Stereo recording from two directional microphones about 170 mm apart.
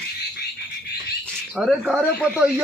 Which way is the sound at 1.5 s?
5° right (ahead or behind).